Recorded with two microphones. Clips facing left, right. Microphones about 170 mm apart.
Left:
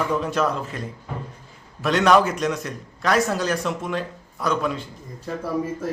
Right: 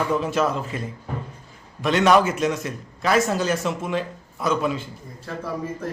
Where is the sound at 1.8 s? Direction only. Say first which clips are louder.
Even; centre (ahead or behind).